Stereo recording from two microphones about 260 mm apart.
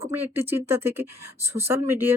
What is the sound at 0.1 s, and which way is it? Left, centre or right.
Speech, centre.